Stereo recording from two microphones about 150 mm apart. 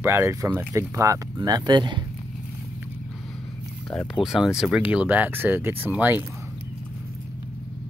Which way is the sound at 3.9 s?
Centre (ahead or behind).